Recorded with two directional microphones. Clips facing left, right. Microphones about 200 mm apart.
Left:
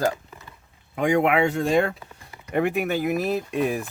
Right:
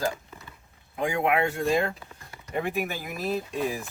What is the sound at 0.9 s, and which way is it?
Speech, 70° left (ahead or behind).